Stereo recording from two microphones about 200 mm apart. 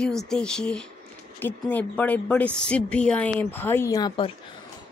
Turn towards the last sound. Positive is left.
turn(degrees=20)  # may be behind; listen again after turning